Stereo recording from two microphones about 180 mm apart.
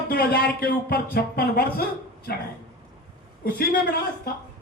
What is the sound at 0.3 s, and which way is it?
Speech, 60° left (ahead or behind).